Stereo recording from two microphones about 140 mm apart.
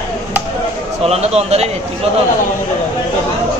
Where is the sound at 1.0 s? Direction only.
50° right (ahead or behind).